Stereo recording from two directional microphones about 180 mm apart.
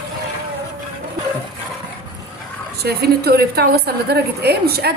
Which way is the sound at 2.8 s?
65° right (ahead or behind).